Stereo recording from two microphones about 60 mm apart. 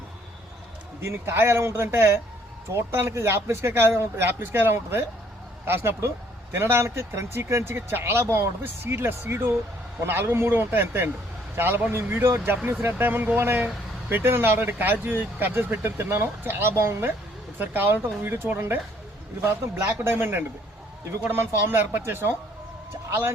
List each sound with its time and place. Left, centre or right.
1.0 s speech: right
20.1 s speech: right